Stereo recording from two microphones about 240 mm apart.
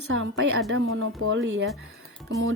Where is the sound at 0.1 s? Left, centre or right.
Right.